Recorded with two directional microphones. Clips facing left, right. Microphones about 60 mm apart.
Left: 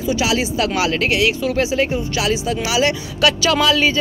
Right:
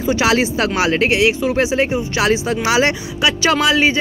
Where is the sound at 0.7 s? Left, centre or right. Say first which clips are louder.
Right 4 dB; right.